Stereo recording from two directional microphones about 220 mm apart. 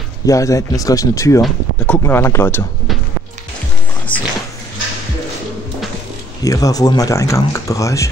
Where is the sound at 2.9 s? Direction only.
Centre (ahead or behind).